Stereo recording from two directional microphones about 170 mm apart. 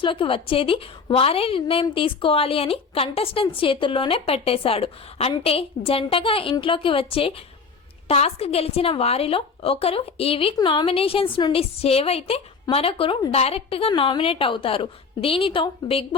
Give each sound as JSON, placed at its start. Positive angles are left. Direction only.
{"t": 0.0, "sound": "a woman's voice", "side_deg": 30}